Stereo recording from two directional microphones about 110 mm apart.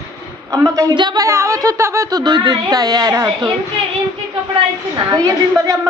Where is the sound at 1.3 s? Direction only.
25° right (ahead or behind).